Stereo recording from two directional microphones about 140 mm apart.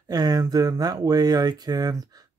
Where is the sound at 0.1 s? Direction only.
30° right (ahead or behind).